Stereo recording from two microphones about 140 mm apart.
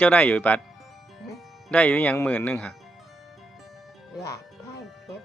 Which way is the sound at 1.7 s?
10° left (ahead or behind).